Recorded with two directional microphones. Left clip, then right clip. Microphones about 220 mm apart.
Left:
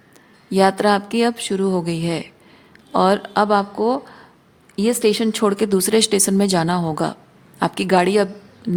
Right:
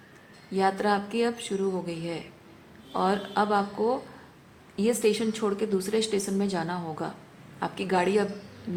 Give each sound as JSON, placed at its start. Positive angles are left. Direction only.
{"t": 0.5, "sound": "speech", "side_deg": 55}